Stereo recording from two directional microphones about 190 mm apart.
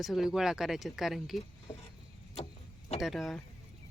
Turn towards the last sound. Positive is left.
turn(degrees=0)  # may be behind; listen again after turning